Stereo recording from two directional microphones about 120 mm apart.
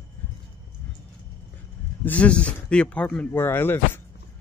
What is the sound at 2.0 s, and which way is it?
Speech, 10° left (ahead or behind).